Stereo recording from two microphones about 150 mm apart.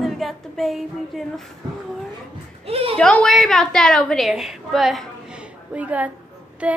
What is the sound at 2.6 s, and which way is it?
Speech, 40° right (ahead or behind).